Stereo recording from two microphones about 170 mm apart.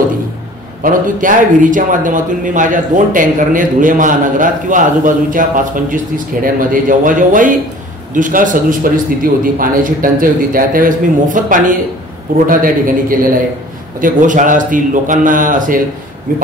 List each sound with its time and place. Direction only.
0.8 s a man's voice: 50° right (ahead or behind)